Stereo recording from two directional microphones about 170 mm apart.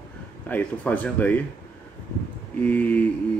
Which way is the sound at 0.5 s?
10° left (ahead or behind).